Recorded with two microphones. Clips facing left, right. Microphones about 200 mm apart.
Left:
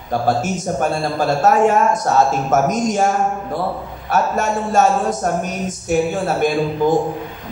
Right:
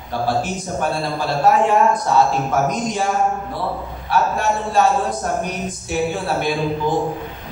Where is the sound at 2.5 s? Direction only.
45° left (ahead or behind).